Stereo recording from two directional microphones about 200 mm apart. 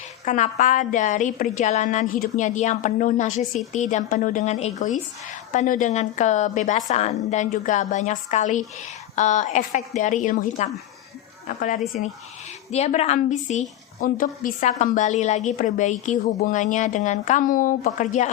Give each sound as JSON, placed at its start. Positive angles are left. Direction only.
{"t": 0.3, "sound": "a woman's voice", "side_deg": 40}